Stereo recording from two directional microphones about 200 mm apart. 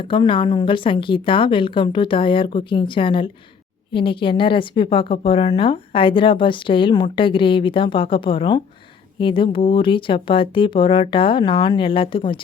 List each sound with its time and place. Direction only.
0.0 s a woman's voice: 25° left (ahead or behind)